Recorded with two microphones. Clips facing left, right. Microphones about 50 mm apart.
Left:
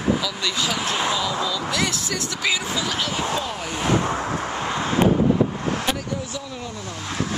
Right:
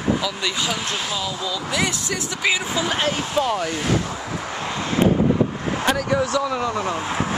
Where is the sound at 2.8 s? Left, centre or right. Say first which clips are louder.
Right 3 dB; right.